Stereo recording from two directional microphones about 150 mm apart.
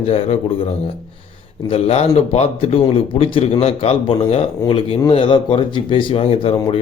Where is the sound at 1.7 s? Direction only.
45° left (ahead or behind).